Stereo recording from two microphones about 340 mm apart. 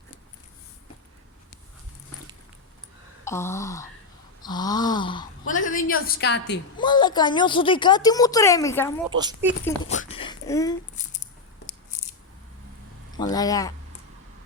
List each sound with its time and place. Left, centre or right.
3.2 s a woman's voice: centre; by 6.6 s left
6.7 s a woman's voice: centre
9.0 s speech: centre
9.9 s a sound: centre
10.9 s a sound: left
13.1 s a woman's voice: centre